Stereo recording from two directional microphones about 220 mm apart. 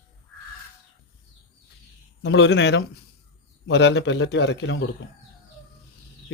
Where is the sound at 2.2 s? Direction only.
55° left (ahead or behind).